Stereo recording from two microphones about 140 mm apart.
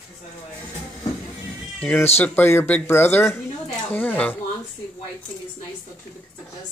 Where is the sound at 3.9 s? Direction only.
15° left (ahead or behind).